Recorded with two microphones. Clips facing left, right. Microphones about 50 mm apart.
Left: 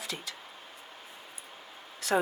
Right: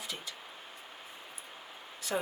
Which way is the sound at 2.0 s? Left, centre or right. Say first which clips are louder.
Left 6 dB; left.